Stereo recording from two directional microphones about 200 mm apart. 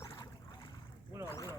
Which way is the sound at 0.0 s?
15° left (ahead or behind).